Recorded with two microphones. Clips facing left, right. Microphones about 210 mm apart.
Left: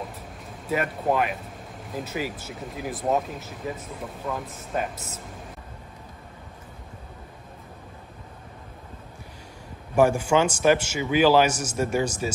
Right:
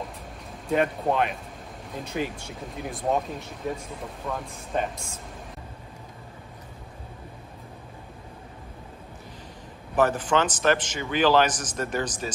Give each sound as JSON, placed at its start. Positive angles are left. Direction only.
{"t": 0.7, "sound": "speech", "side_deg": 5}
{"t": 9.9, "sound": "a man's voice", "side_deg": 10}